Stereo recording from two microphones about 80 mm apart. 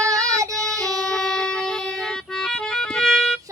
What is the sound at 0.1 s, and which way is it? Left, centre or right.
Child singing, right.